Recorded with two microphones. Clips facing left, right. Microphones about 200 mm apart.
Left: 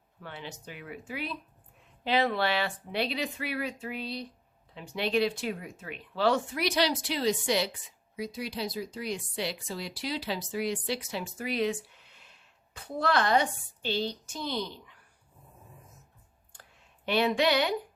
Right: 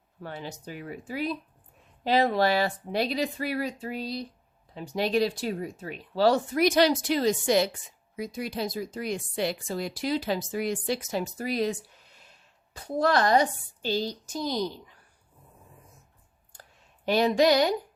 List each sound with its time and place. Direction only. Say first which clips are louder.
0.2 s speech: right 5 dB; 40° right (ahead or behind)
17.1 s speech: right 4 dB; 40° right (ahead or behind)